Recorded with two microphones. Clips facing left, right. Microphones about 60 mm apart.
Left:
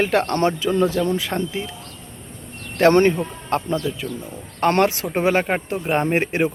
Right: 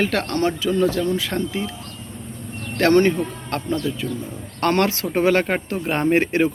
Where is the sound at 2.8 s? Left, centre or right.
Left.